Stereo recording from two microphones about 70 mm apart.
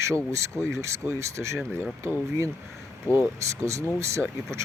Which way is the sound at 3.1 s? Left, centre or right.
Right.